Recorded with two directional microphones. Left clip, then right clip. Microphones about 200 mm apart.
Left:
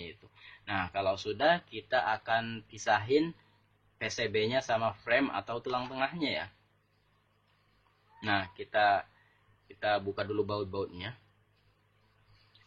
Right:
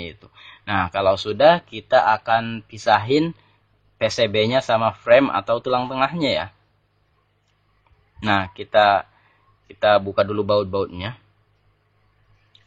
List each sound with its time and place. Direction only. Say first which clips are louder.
0.7 s speech: right 13 dB; 40° right (ahead or behind)
8.2 s speech: right 11 dB; 40° right (ahead or behind)